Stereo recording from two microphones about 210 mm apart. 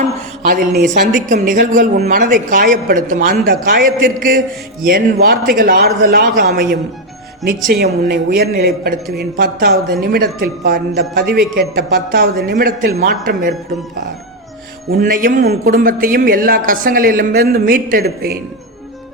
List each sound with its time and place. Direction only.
0.9 s speech: 35° right (ahead or behind)
14.8 s speech: 45° right (ahead or behind)